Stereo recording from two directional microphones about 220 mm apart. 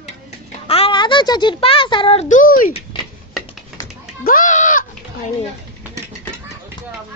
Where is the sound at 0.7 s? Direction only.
25° left (ahead or behind).